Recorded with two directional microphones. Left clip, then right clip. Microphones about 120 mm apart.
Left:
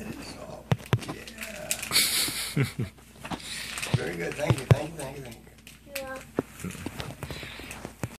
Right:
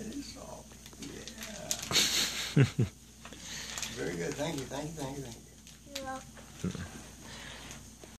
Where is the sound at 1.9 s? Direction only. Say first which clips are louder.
Left 3 dB; 45° right (ahead or behind).